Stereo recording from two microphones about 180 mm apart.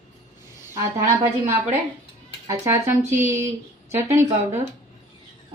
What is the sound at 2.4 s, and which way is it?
A woman's voice, 15° right (ahead or behind).